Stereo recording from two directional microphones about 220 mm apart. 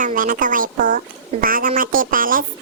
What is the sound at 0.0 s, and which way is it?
Speech, 35° right (ahead or behind).